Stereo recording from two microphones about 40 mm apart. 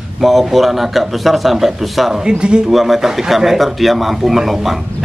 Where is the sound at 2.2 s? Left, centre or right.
Centre.